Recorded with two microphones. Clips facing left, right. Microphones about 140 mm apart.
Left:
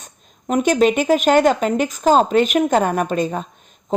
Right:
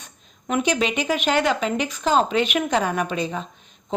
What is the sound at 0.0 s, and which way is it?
A woman's voice, 40° left (ahead or behind).